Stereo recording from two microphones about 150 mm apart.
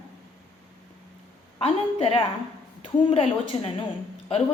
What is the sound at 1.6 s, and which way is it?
A woman's voice, 40° left (ahead or behind).